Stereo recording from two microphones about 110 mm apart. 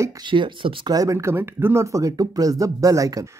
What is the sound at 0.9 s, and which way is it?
Speech, 30° right (ahead or behind).